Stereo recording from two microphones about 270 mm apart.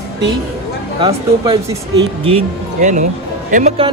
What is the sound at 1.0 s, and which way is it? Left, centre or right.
A man's voice, centre.